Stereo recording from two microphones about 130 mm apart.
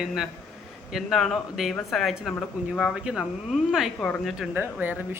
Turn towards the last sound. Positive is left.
turn(degrees=-15)  # may be behind; listen again after turning